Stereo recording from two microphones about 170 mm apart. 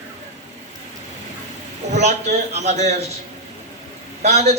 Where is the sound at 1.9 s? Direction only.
40° right (ahead or behind).